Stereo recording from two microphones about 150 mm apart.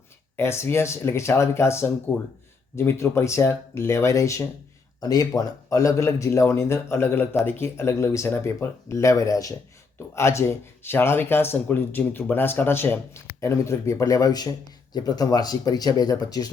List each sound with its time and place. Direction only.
0.3 s speech: 15° left (ahead or behind)